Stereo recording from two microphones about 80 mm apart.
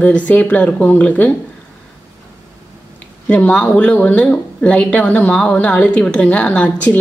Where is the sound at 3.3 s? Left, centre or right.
Centre.